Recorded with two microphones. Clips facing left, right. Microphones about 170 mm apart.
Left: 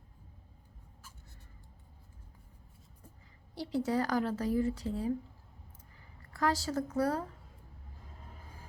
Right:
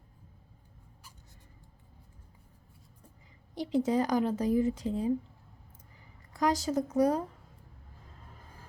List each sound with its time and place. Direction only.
3.5 s speech: 20° right (ahead or behind)
6.3 s speech: 20° right (ahead or behind)